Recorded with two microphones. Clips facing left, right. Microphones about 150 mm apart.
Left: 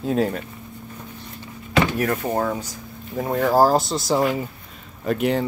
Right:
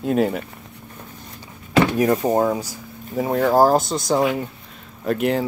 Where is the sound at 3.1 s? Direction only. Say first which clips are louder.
Right 2 dB; centre (ahead or behind).